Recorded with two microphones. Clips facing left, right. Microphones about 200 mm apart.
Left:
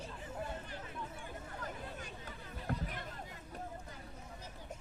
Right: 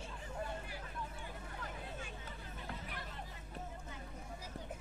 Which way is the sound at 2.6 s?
45° left (ahead or behind).